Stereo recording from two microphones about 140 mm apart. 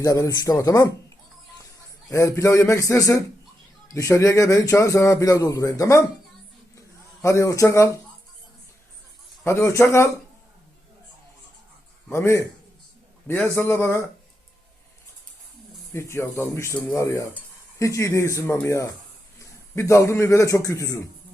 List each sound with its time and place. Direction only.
0.0 s cutlery: 25° left (ahead or behind)
2.0 s cutlery: 20° left (ahead or behind)
6.7 s a sound: 20° left (ahead or behind)
9.4 s speech: 15° left (ahead or behind)
12.0 s speech: 20° left (ahead or behind)
15.9 s cutlery: 20° left (ahead or behind)
19.4 s a man's voice: 20° left (ahead or behind)
20.7 s cutlery: 25° left (ahead or behind)